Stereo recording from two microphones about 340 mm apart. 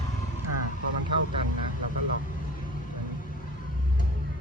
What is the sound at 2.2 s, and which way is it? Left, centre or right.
Vehicle, left.